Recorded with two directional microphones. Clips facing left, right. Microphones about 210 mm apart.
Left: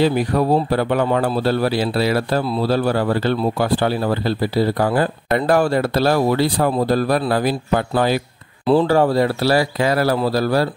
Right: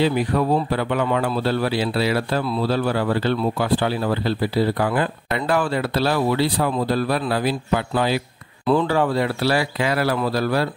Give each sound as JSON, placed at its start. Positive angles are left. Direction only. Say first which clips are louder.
{"t": 0.0, "sound": "speech", "louder": "left 3 dB", "side_deg": 40}
{"t": 8.6, "sound": "speech", "louder": "left 4 dB", "side_deg": 35}